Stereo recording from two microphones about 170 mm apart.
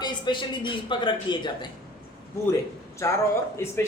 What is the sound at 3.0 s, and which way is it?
Speech, 20° left (ahead or behind).